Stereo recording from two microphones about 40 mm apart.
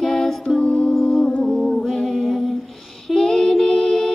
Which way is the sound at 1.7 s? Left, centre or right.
Centre.